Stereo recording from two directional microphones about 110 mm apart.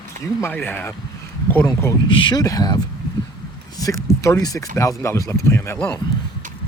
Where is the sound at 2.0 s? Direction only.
45° left (ahead or behind).